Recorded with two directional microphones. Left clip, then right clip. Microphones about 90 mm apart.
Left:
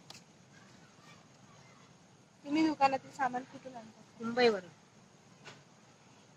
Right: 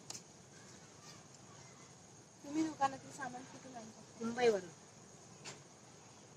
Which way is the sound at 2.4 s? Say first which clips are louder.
Left 7 dB; 25° left (ahead or behind).